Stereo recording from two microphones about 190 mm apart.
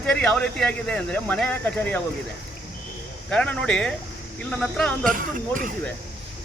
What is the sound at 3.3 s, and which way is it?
Speech, 5° left (ahead or behind).